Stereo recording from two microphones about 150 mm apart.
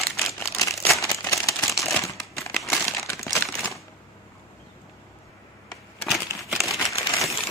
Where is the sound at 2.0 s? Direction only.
20° left (ahead or behind).